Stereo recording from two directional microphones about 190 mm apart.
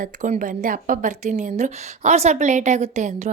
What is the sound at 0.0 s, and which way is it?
A woman's voice, 40° right (ahead or behind).